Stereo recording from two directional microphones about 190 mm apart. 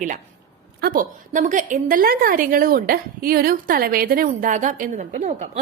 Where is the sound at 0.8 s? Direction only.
50° right (ahead or behind).